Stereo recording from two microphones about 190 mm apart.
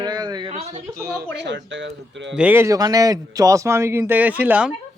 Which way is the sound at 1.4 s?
70° right (ahead or behind).